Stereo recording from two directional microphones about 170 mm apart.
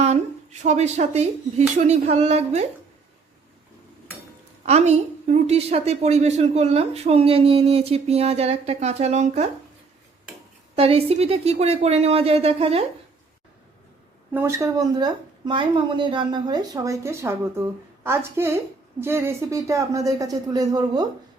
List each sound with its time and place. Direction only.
0.0 s a woman's voice: 45° right (ahead or behind)
4.6 s a woman's voice: 40° right (ahead or behind)
10.8 s a woman's voice: 35° right (ahead or behind)
14.3 s a woman's voice: 15° right (ahead or behind)